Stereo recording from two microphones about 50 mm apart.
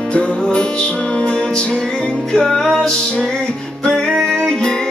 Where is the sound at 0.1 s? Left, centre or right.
Left.